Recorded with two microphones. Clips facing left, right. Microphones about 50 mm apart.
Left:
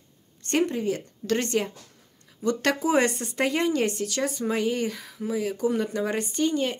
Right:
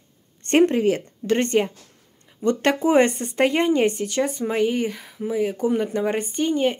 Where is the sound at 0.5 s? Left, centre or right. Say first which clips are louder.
Right 7 dB; right.